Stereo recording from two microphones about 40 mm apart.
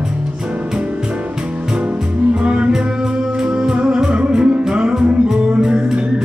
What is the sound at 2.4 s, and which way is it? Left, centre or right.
Music, right.